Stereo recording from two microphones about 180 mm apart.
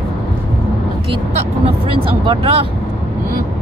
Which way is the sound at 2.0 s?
30° right (ahead or behind).